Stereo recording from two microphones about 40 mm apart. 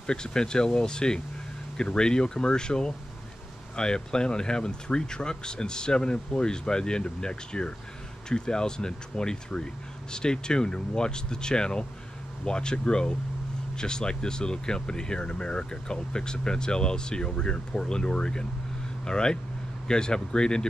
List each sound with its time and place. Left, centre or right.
0.0 s speech: centre